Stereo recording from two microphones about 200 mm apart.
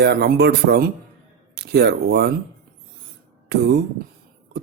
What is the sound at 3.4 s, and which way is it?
Speech, 55° right (ahead or behind).